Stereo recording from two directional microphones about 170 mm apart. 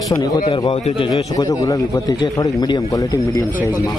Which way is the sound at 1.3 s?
20° left (ahead or behind).